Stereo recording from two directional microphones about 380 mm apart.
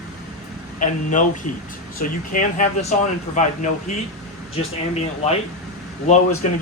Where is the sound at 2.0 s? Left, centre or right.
Left.